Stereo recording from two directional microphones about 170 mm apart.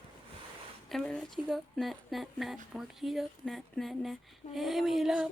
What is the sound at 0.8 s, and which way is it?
Speech, 5° left (ahead or behind).